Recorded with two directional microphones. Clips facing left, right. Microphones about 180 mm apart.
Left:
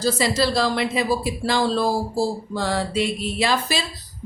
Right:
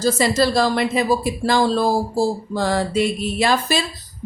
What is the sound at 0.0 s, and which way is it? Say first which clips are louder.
Speech: right 3 dB; 45° right (ahead or behind).